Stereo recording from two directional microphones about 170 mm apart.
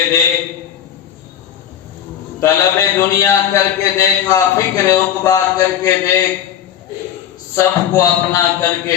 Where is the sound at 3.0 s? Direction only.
15° left (ahead or behind).